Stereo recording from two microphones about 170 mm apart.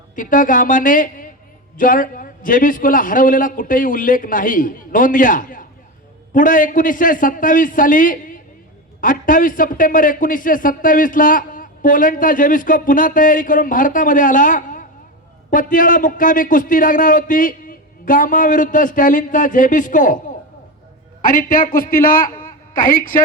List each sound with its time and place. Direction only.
0.2 s a man's voice: 50° left (ahead or behind)
21.2 s a man's voice: 50° left (ahead or behind)